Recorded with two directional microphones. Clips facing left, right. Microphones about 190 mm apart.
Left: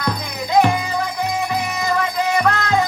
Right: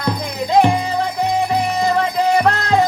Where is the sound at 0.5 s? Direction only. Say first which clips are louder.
Right 2 dB; 30° right (ahead or behind).